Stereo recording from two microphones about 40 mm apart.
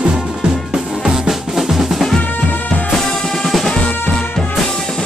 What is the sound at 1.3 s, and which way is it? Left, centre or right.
Drum, centre.